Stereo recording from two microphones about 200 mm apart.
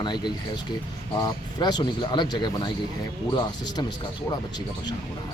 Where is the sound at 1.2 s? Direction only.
20° left (ahead or behind).